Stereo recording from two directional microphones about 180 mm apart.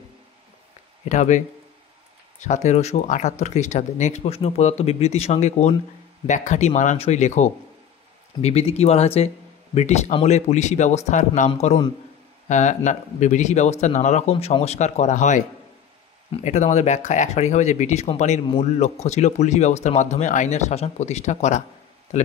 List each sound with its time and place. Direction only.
1.0 s speech: 40° left (ahead or behind)
2.4 s speech: 40° left (ahead or behind)
16.4 s speech: 40° left (ahead or behind)